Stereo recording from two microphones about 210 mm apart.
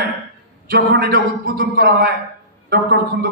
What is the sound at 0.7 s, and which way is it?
A man's voice, 50° right (ahead or behind).